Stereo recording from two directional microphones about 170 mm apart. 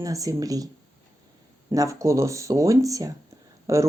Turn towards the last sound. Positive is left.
turn(degrees=-20)  # may be behind; listen again after turning